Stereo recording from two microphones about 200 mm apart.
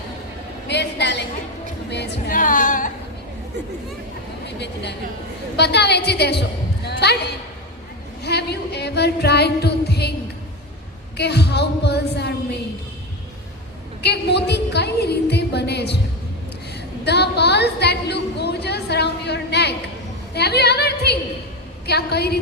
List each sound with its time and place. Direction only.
0.7 s a sound: 55° left (ahead or behind)
1.9 s speech: 60° left (ahead or behind)
2.3 s singing: 40° left (ahead or behind)
4.4 s a woman's voice: 60° left (ahead or behind)
11.2 s a woman's voice: 55° left (ahead or behind)
14.0 s a woman's voice: 55° left (ahead or behind)
17.0 s a sound: 55° left (ahead or behind)
21.8 s a woman's voice: 55° left (ahead or behind)